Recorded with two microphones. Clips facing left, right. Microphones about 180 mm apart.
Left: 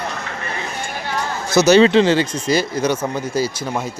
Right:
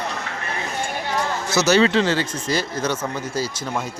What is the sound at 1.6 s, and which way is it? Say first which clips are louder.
Speech: left 6 dB; 20° left (ahead or behind).